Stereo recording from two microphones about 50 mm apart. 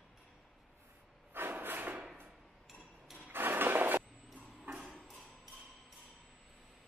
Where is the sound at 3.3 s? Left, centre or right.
Right.